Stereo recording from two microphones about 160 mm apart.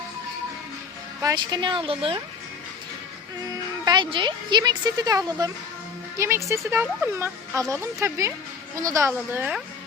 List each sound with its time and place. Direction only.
1.2 s speech: 25° right (ahead or behind)
3.5 s speech: 25° right (ahead or behind); by 9.6 s 10° right (ahead or behind)